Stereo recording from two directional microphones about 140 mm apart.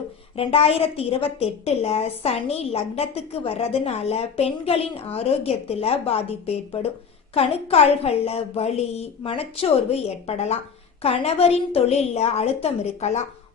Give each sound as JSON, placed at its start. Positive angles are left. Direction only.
{"t": 0.3, "sound": "a woman's voice", "side_deg": 45}